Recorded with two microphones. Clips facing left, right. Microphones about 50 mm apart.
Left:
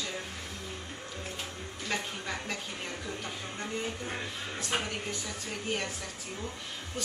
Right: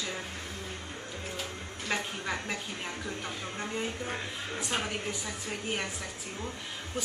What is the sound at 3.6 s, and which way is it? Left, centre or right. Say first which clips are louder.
A woman's voice: right 1 dB; centre.